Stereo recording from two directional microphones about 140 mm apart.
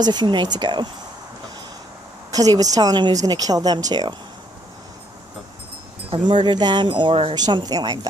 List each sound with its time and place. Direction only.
0.0 s speech: 30° right (ahead or behind)
2.3 s speech: 25° right (ahead or behind)
6.1 s speech: 35° right (ahead or behind)